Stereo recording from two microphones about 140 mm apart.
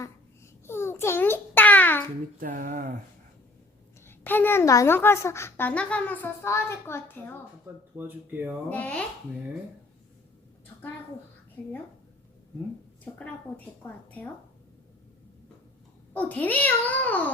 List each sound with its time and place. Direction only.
0.7 s babbling: 15° left (ahead or behind)
2.4 s speech: 80° right
4.0 s a woman's voice: 15° left (ahead or behind)
7.9 s speech: 15° right (ahead or behind)
8.7 s a woman's voice: 10° left (ahead or behind)
13.8 s a woman's voice: 10° left (ahead or behind)
16.1 s a woman's voice: 10° left (ahead or behind)